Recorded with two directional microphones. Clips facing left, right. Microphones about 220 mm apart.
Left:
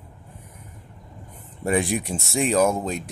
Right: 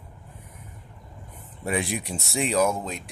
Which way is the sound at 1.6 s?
45° left (ahead or behind).